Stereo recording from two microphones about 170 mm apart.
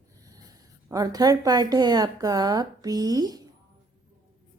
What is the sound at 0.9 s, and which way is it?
A woman's voice, 20° right (ahead or behind).